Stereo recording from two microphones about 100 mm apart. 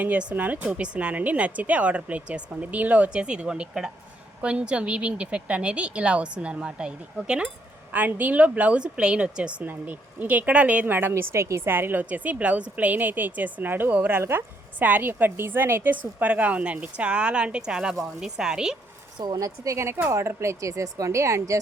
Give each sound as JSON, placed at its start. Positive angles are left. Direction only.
{"t": 0.0, "sound": "a woman's voice", "side_deg": -15}
{"t": 19.2, "sound": "speech", "side_deg": -40}